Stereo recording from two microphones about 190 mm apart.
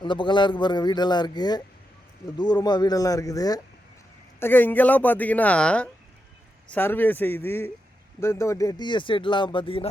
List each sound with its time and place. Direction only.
0.0 s speech: 25° left (ahead or behind)